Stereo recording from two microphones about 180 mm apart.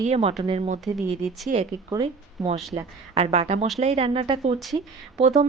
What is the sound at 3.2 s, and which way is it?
Speech, 35° right (ahead or behind).